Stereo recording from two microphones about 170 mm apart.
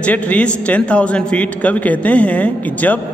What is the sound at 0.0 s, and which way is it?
A man's voice, 10° left (ahead or behind).